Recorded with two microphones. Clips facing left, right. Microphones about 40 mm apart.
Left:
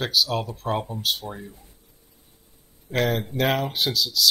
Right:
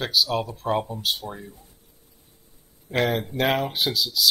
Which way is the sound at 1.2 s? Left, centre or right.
Centre.